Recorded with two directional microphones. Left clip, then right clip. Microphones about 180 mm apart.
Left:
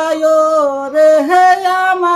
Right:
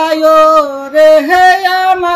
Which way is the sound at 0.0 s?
25° left (ahead or behind).